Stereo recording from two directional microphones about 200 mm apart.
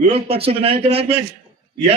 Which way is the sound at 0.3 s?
30° right (ahead or behind).